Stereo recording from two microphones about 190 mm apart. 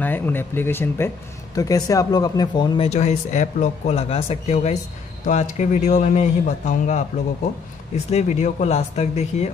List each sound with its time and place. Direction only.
0.0 s speech: 10° left (ahead or behind)
2.9 s speech: 35° left (ahead or behind)